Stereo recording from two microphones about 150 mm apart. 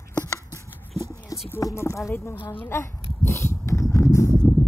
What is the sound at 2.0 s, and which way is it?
Speech, 20° left (ahead or behind).